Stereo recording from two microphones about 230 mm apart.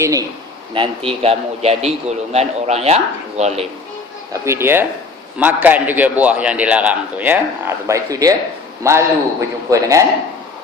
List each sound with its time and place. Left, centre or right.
0.0 s a man's voice: centre
4.3 s a man's voice: centre